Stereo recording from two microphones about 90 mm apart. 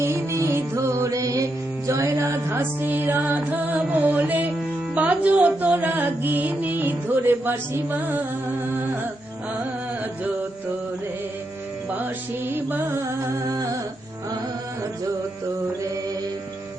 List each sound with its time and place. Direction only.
0.0 s music: 30° right (ahead or behind)
12.5 s music: 25° right (ahead or behind)